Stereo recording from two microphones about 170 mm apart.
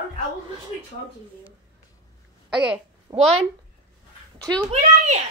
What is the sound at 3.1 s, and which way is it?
Speech, 30° right (ahead or behind).